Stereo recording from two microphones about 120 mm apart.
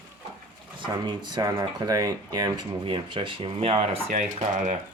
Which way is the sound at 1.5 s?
30° right (ahead or behind).